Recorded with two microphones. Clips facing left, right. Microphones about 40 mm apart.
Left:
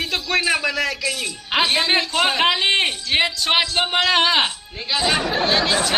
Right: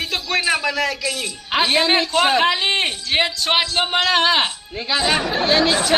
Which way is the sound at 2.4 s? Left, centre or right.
Left.